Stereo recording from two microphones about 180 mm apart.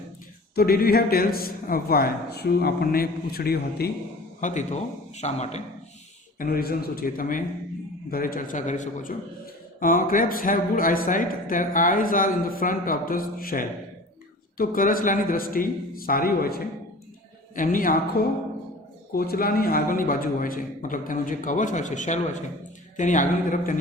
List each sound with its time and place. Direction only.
0.5 s a man's voice: 55° left (ahead or behind)
4.4 s a man's voice: 45° left (ahead or behind)
6.4 s speech: 55° left (ahead or behind)